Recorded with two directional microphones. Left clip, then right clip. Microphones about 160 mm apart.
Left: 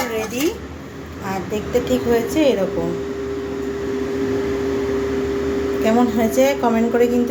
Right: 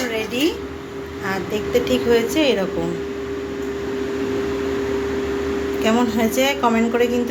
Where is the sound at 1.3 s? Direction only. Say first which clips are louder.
Even; 10° left (ahead or behind).